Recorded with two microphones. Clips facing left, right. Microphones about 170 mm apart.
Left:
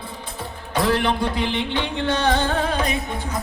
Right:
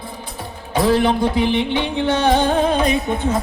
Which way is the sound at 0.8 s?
15° right (ahead or behind).